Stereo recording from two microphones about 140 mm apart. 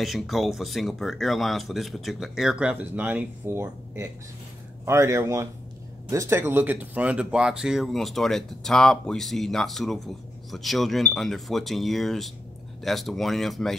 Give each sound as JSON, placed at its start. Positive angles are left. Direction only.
{"t": 0.0, "sound": "speech", "side_deg": 0}